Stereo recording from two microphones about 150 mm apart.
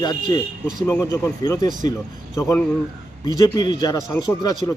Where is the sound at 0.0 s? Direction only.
30° left (ahead or behind).